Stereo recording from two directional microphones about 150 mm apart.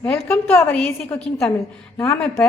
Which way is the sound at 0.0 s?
15° left (ahead or behind).